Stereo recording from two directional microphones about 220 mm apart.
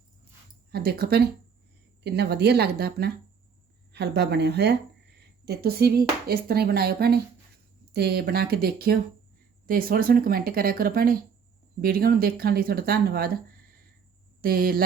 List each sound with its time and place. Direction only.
0.7 s speech: 45° right (ahead or behind)
14.4 s speech: 40° right (ahead or behind)